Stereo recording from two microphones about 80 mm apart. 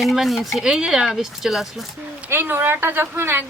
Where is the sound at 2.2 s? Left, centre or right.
Right.